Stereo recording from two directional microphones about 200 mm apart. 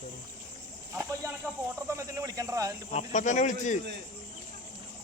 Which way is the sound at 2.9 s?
35° left (ahead or behind).